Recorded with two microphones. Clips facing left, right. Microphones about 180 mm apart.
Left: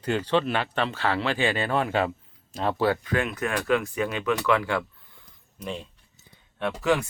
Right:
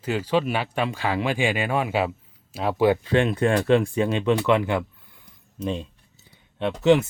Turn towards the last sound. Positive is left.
turn(degrees=-25)  # may be behind; listen again after turning